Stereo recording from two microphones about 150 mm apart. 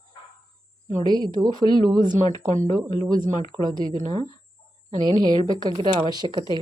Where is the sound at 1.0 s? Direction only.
30° right (ahead or behind).